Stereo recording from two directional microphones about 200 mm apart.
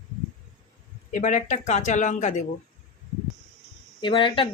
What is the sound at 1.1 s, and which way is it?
Speech, 40° left (ahead or behind).